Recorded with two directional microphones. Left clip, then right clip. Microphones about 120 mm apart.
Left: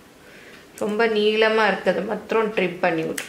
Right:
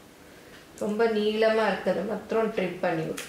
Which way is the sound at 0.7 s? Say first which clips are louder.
Left 5 dB; 30° left (ahead or behind).